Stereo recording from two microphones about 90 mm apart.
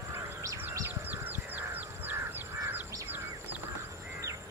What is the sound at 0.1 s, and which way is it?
Bird, 40° right (ahead or behind).